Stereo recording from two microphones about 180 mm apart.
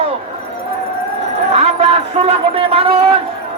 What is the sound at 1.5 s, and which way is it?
A man's voice, 35° right (ahead or behind).